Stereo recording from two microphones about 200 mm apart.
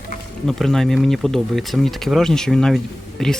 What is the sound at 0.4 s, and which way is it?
Speech, centre (ahead or behind).